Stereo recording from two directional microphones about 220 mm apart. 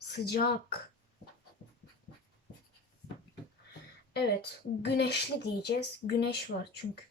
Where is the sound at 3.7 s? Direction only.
50° left (ahead or behind).